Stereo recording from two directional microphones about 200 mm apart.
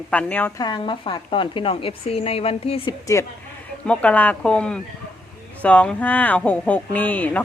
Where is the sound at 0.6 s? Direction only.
20° left (ahead or behind).